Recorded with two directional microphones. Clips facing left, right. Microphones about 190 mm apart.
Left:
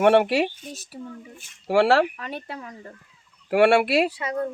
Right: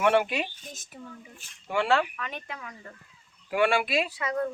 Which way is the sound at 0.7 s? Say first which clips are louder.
Left 7 dB; 35° left (ahead or behind).